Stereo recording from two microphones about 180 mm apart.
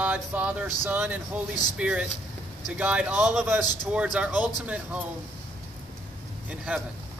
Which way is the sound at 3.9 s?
5° right (ahead or behind).